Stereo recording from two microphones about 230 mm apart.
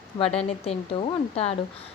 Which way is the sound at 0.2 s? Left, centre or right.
Left.